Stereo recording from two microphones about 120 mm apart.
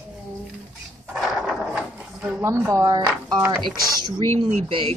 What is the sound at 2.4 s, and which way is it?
A woman's voice, 25° right (ahead or behind).